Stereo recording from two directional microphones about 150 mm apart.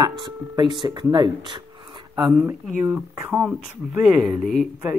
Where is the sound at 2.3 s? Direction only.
5° right (ahead or behind).